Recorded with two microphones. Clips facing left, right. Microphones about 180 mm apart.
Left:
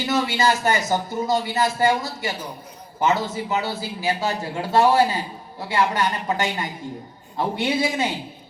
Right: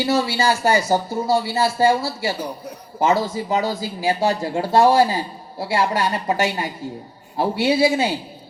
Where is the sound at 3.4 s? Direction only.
35° right (ahead or behind).